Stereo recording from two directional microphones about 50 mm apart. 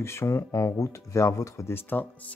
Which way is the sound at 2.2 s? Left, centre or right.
Left.